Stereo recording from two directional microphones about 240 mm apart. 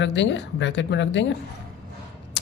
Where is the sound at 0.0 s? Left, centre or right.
Left.